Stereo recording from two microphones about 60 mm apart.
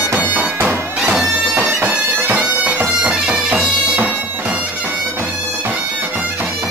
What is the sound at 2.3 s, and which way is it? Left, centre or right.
Bagpipes, right.